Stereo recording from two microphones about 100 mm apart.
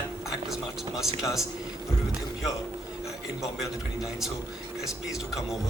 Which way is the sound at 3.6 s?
5° right (ahead or behind).